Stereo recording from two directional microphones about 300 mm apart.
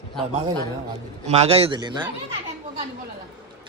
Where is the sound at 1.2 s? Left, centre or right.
Right.